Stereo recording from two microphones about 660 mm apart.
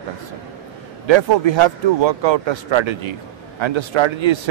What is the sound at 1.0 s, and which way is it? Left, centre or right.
A man's voice, right.